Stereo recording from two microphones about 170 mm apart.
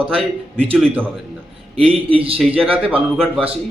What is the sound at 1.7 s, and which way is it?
Speech, 35° right (ahead or behind).